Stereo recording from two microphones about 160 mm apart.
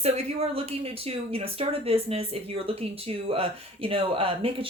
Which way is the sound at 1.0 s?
35° right (ahead or behind).